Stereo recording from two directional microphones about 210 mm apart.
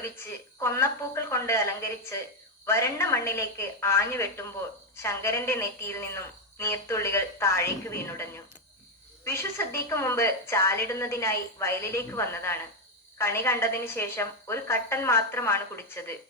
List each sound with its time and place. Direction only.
0.6 s a woman's voice: 10° left (ahead or behind)